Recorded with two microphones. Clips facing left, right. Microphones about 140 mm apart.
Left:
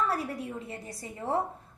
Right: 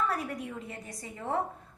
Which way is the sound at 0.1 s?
30° left (ahead or behind).